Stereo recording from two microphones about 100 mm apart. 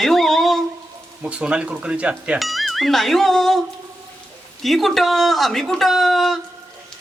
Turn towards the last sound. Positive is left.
turn(degrees=0)  # may be behind; listen again after turning